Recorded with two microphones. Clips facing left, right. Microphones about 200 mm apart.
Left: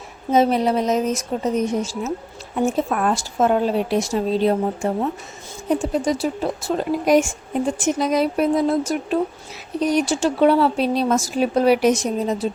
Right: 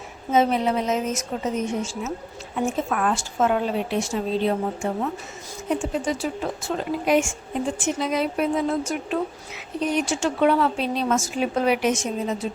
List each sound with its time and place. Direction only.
0.3 s speech: 35° left (ahead or behind)